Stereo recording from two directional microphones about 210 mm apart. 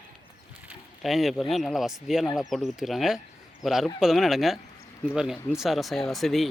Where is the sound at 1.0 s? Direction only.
Centre (ahead or behind).